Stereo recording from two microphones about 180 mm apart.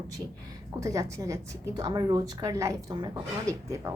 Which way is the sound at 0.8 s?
15° right (ahead or behind).